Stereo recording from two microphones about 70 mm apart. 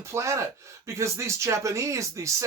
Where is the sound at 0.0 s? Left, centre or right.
Right.